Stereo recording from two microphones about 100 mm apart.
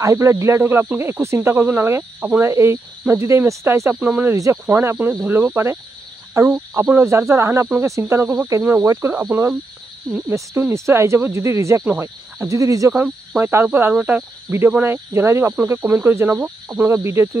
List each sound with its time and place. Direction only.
0.0 s speech: 30° right (ahead or behind)